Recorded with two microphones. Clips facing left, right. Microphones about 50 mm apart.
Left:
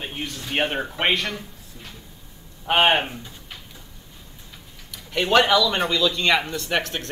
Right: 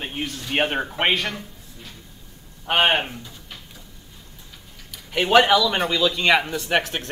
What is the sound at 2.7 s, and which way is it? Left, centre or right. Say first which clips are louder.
Speech: left 1 dB; centre.